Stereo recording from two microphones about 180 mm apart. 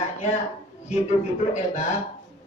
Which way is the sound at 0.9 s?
40° left (ahead or behind).